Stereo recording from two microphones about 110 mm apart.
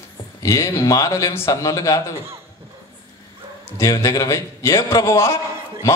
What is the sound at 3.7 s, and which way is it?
A man's voice, 30° left (ahead or behind).